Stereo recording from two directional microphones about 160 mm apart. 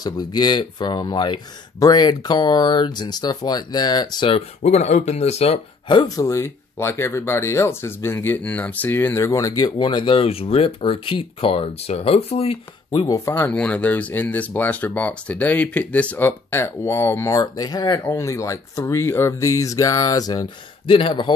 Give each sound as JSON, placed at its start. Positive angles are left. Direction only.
{"t": 0.0, "sound": "speech", "side_deg": 25}
{"t": 4.6, "sound": "speech", "side_deg": 45}
{"t": 13.0, "sound": "speech", "side_deg": 20}